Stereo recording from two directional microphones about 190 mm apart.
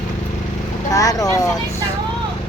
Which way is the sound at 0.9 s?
20° left (ahead or behind).